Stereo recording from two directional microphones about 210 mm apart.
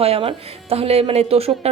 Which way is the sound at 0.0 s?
25° right (ahead or behind).